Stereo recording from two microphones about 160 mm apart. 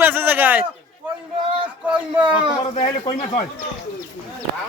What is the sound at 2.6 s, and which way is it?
Speech, 50° left (ahead or behind).